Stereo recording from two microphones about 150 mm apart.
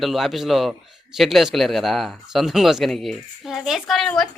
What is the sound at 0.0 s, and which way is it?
Speech, centre (ahead or behind).